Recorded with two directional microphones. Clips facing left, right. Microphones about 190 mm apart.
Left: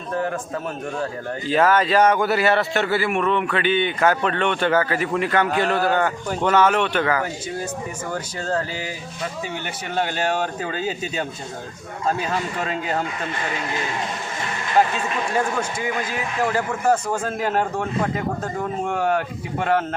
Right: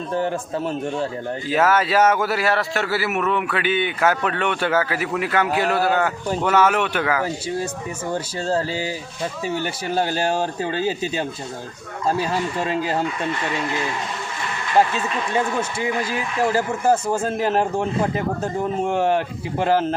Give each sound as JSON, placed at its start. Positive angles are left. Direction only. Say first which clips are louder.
{"t": 0.1, "sound": "a man's voice", "louder": "right 1 dB", "side_deg": -30}
{"t": 1.5, "sound": "a man's voice", "louder": "left 1 dB", "side_deg": -5}
{"t": 8.1, "sound": "a man's voice", "louder": "right 3 dB", "side_deg": -25}
{"t": 15.8, "sound": "a man's voice", "louder": "right 2 dB", "side_deg": -30}